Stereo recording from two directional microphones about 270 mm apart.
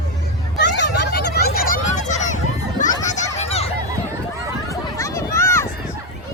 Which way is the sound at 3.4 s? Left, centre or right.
Left.